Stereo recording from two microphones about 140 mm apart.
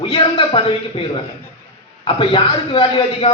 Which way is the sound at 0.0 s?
40° left (ahead or behind).